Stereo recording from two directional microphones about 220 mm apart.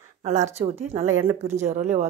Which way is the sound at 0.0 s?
30° right (ahead or behind).